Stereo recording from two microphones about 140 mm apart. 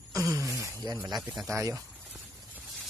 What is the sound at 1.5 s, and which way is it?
Speech, 20° right (ahead or behind).